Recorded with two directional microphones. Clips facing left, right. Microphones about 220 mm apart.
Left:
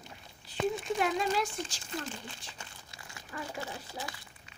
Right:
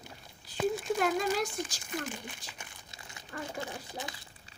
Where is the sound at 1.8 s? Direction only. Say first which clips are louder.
Right 1 dB; 15° right (ahead or behind).